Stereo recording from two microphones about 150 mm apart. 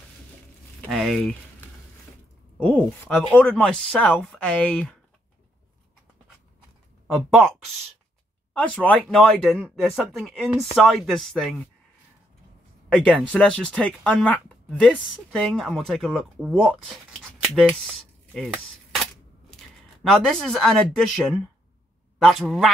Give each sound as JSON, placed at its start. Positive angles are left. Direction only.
{"t": 0.7, "sound": "speech", "side_deg": 0}
{"t": 2.6, "sound": "speech", "side_deg": 10}
{"t": 7.2, "sound": "speech", "side_deg": 0}
{"t": 12.9, "sound": "speech", "side_deg": 5}
{"t": 18.3, "sound": "a sound", "side_deg": 0}
{"t": 20.0, "sound": "speech", "side_deg": 0}